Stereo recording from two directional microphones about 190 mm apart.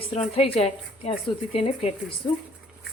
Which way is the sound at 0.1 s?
30° left (ahead or behind).